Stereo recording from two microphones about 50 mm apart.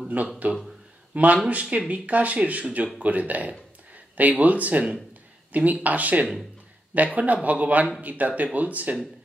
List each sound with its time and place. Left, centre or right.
0.2 s speech: right